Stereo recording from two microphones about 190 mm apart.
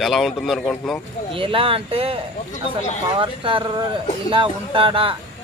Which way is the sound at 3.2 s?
25° right (ahead or behind).